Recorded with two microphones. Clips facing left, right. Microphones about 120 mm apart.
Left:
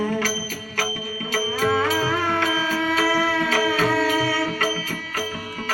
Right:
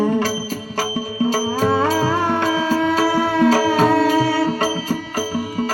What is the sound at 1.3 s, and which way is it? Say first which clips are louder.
Music: right 1 dB; 25° right (ahead or behind).